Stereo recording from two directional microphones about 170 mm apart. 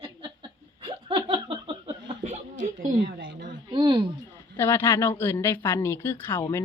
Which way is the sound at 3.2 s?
90° right.